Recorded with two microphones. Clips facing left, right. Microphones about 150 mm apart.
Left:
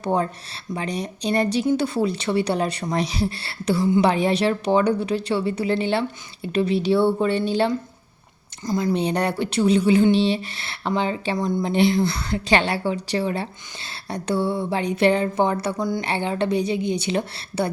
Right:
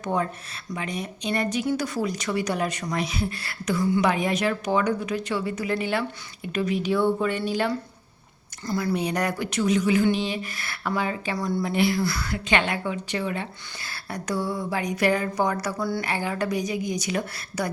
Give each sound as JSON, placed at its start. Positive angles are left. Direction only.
{"t": 0.0, "sound": "speech", "side_deg": 30}